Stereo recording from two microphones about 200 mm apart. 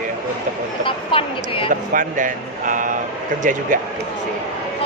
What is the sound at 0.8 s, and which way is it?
Speech, 25° left (ahead or behind).